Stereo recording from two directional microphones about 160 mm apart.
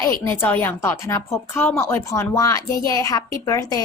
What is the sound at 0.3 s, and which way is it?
A woman's voice, 10° left (ahead or behind).